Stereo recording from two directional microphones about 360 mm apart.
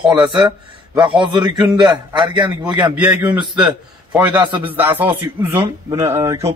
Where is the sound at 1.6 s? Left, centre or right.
Centre.